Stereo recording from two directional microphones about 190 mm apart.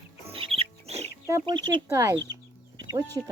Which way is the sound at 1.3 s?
25° right (ahead or behind).